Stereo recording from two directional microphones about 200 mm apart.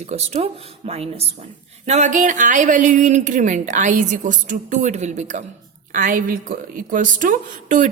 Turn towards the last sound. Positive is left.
turn(degrees=-40)  # may be behind; listen again after turning